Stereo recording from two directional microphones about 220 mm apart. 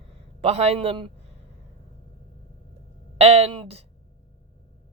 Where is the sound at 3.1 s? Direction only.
30° right (ahead or behind).